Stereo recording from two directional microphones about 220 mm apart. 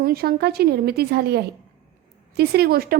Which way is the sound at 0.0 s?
45° right (ahead or behind).